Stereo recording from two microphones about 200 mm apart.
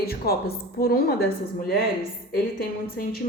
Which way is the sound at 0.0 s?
50° left (ahead or behind).